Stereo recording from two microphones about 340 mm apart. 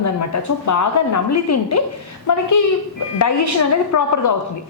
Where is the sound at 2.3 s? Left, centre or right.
Left.